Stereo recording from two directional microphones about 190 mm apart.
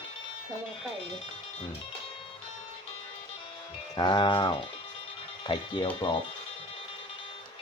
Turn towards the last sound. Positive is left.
turn(degrees=25)  # may be behind; listen again after turning